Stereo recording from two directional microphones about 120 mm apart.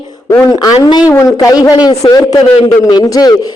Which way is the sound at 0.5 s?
35° left (ahead or behind).